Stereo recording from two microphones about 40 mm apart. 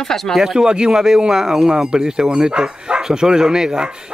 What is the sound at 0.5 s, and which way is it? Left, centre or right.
Speech, centre.